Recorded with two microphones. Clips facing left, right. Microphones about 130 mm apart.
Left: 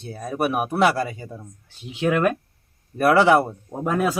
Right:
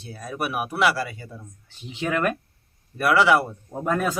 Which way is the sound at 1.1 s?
25° left (ahead or behind).